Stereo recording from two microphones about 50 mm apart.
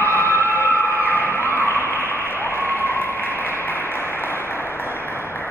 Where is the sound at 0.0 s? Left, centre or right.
Left.